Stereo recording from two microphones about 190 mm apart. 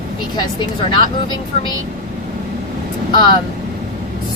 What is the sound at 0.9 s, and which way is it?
Speech, 25° left (ahead or behind).